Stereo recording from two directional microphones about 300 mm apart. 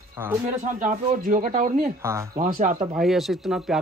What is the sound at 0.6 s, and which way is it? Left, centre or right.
Speech, right.